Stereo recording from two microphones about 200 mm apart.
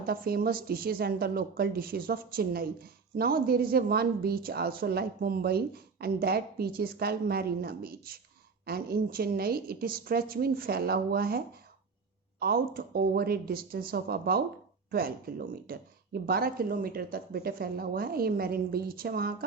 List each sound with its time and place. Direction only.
0.0 s a woman's voice: 50° right (ahead or behind)